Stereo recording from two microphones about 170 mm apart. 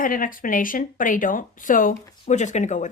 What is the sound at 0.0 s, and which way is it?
Speech, 55° left (ahead or behind).